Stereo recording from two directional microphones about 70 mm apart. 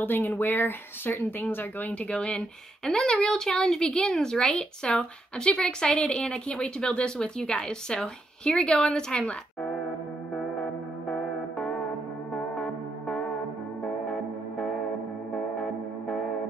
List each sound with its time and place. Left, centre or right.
0.0 s speech: left; by 9.7 s centre
11.1 s music: centre